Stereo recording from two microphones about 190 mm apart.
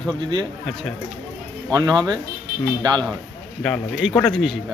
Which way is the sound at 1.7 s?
20° right (ahead or behind).